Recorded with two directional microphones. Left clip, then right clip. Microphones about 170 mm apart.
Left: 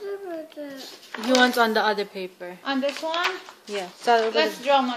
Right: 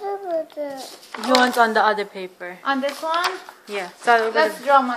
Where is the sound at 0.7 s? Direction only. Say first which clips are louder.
Right 3 dB; 15° right (ahead or behind).